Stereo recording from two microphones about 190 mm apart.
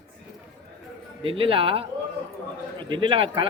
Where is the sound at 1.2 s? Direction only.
30° right (ahead or behind).